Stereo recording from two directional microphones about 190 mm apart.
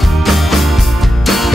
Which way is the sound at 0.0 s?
Centre (ahead or behind).